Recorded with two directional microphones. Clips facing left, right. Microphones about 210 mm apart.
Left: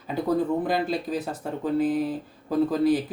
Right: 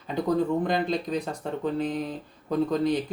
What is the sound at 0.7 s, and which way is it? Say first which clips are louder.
Speech: even; 5° left (ahead or behind).